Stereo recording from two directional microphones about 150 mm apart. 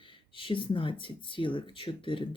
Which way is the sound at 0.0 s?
35° left (ahead or behind).